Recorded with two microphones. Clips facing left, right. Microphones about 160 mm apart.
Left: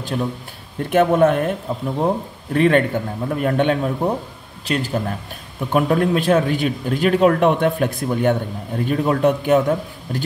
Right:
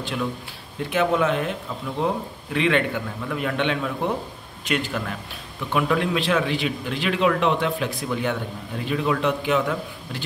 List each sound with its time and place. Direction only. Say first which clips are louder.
0.0 s speech: left 4 dB; 40° left (ahead or behind)
0.8 s a man's voice: left 7 dB; 50° left (ahead or behind)